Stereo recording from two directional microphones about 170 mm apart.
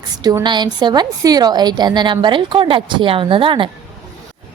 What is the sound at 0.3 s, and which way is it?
A woman's voice, 25° right (ahead or behind).